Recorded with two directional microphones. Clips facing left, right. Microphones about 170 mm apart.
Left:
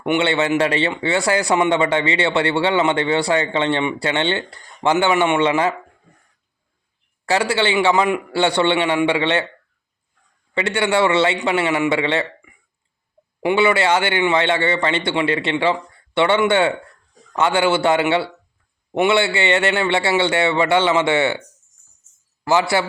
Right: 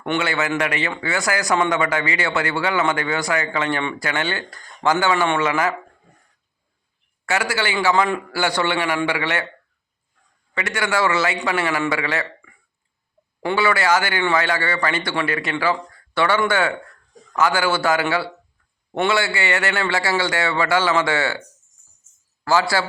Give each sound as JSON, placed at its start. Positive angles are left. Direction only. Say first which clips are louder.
{"t": 0.2, "sound": "speech", "louder": "left 5 dB", "side_deg": 30}
{"t": 7.3, "sound": "speech", "louder": "left 4 dB", "side_deg": 30}
{"t": 10.5, "sound": "speech", "louder": "left 4 dB", "side_deg": 30}
{"t": 22.4, "sound": "speech", "louder": "left 2 dB", "side_deg": 20}